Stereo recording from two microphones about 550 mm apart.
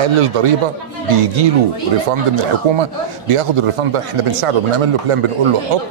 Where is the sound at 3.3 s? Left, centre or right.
Right.